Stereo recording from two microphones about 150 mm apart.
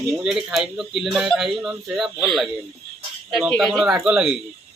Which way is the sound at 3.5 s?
Centre (ahead or behind).